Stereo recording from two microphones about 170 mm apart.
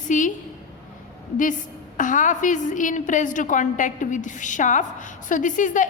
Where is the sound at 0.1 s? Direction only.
50° left (ahead or behind).